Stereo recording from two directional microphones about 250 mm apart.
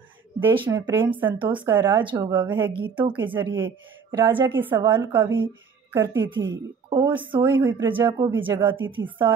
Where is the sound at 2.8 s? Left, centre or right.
Centre.